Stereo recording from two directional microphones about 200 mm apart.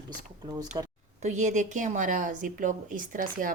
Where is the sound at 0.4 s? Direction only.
20° right (ahead or behind).